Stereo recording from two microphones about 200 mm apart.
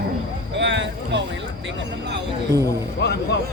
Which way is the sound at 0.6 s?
65° right (ahead or behind).